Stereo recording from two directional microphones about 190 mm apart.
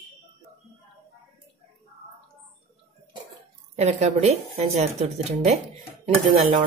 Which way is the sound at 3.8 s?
35° right (ahead or behind).